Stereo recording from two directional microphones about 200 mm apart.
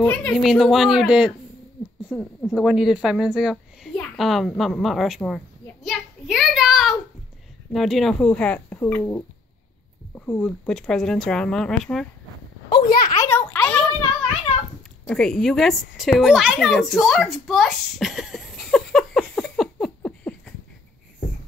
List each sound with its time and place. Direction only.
0.0 s speech: 5° left (ahead or behind)
5.9 s child singing: centre (ahead or behind)
7.7 s speech: centre (ahead or behind)
12.6 s speech: 25° left (ahead or behind)
12.9 s a sound: 45° left (ahead or behind)
13.2 s a sound: 10° left (ahead or behind)
15.0 s a woman's voice: 5° left (ahead or behind)